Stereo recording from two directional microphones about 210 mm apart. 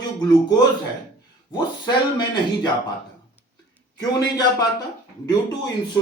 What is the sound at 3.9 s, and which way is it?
Speech, 20° left (ahead or behind).